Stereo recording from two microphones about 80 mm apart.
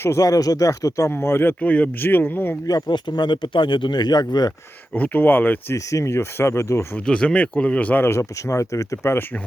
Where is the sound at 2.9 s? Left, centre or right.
Left.